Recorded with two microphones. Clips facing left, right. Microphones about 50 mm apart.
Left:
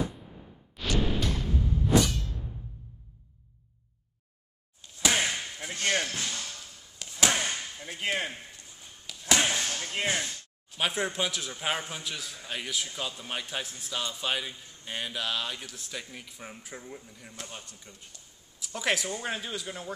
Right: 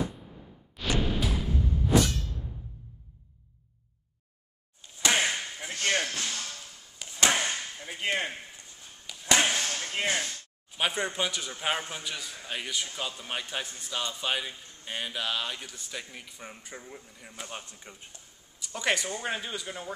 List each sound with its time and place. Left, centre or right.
0.8 s music: centre
4.8 s slam: centre
7.0 s chop: centre
9.2 s a sound: centre
9.7 s speech: centre
17.5 s speech: right
18.6 s speech: centre